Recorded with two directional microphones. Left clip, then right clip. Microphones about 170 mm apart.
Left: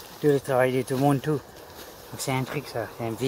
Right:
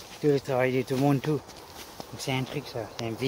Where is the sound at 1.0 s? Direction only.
Centre (ahead or behind).